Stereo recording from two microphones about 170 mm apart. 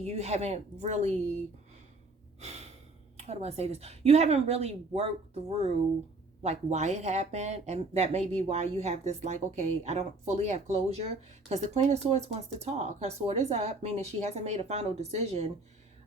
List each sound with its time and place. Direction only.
0.0 s speech: 40° right (ahead or behind)
3.2 s speech: 40° right (ahead or behind)